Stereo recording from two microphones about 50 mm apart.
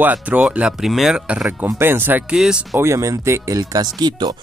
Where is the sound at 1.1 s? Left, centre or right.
Right.